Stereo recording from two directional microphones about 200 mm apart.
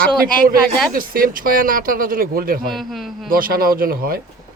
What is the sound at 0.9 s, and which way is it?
Speech, 45° right (ahead or behind).